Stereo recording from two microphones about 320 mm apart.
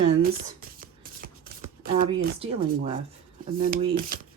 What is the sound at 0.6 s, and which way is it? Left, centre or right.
Whispering, right.